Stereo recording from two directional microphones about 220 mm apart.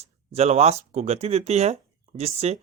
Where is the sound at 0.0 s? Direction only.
30° right (ahead or behind).